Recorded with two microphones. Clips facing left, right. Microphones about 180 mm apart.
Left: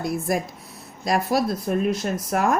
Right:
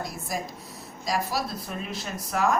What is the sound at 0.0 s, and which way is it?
Speech, 60° left (ahead or behind).